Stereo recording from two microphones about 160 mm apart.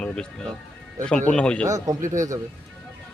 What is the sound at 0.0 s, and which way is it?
Speech, 5° left (ahead or behind).